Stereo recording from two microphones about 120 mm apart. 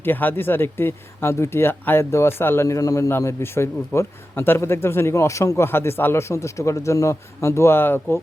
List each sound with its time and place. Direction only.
0.0 s speech: 15° left (ahead or behind)